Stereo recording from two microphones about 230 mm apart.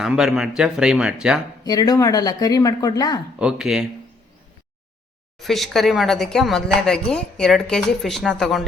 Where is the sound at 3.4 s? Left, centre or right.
Centre.